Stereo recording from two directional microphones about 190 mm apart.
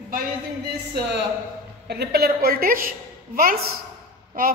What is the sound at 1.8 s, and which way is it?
A woman's voice, 60° right (ahead or behind).